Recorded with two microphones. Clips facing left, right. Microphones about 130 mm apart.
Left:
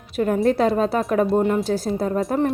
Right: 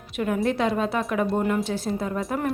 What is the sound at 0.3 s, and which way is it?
Speech, 35° left (ahead or behind).